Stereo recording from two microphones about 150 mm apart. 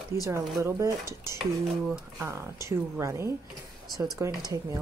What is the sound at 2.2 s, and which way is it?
Speech, 20° right (ahead or behind).